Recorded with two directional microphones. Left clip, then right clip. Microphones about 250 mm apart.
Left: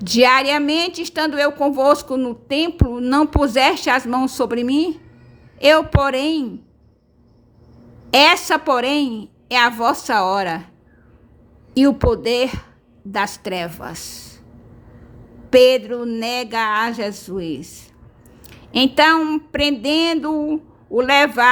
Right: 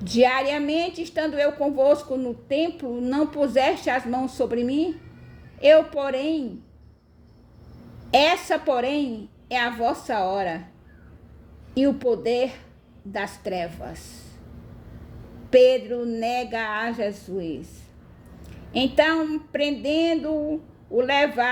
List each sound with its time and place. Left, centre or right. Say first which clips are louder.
0.0 s a woman's voice: left 6 dB; left
8.1 s a woman's voice: left 6 dB; left
11.7 s a woman's voice: left 6 dB; left
15.4 s a woman's voice: left 4 dB; left